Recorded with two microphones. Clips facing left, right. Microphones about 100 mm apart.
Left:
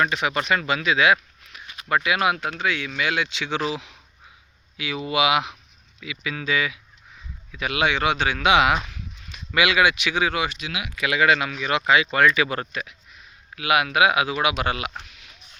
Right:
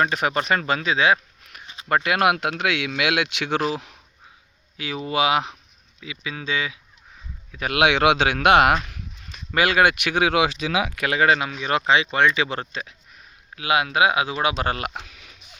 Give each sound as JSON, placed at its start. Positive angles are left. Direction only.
{"t": 0.0, "sound": "speech", "side_deg": -40}
{"t": 1.6, "sound": "a sound", "side_deg": -25}
{"t": 2.0, "sound": "speech", "side_deg": -60}
{"t": 3.7, "sound": "speech", "side_deg": -45}
{"t": 7.5, "sound": "speech", "side_deg": -40}
{"t": 7.8, "sound": "speech", "side_deg": -80}
{"t": 8.9, "sound": "speech", "side_deg": -40}
{"t": 11.0, "sound": "speech", "side_deg": -35}